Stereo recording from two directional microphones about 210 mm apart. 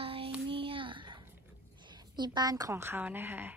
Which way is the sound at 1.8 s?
20° right (ahead or behind).